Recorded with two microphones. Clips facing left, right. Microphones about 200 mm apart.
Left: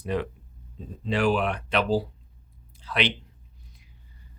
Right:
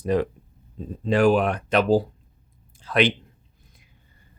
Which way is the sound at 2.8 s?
50° right (ahead or behind).